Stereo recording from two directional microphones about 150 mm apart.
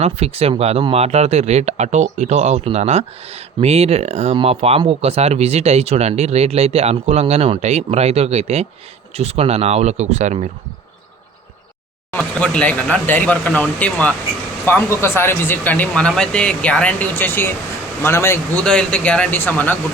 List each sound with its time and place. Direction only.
0.0 s speech: 45° right (ahead or behind)
12.1 s speech: 10° left (ahead or behind)
18.6 s speech: 5° left (ahead or behind)